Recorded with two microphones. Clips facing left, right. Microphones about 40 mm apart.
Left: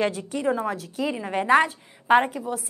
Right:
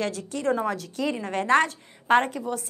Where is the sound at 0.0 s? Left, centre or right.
Centre.